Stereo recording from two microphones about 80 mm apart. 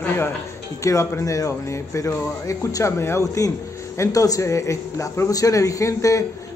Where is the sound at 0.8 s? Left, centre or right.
Left.